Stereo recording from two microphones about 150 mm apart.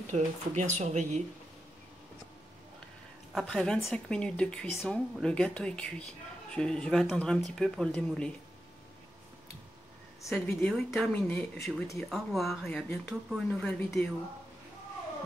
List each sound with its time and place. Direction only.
0.1 s speech: 50° right (ahead or behind)
3.3 s a woman's voice: 5° left (ahead or behind)
10.3 s a woman's voice: 5° left (ahead or behind)